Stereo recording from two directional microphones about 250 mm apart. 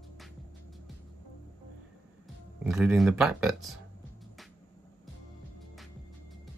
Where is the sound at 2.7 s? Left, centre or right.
Centre.